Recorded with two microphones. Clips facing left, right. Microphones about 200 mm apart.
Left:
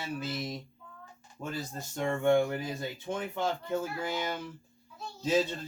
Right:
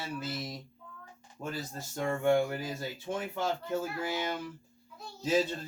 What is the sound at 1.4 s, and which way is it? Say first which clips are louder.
Speech: left 1 dB; 5° right (ahead or behind).